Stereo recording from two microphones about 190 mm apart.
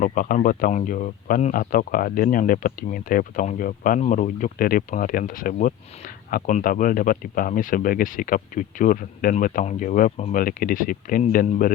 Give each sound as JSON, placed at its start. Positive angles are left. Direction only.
{"t": 0.0, "sound": "speech", "side_deg": 45}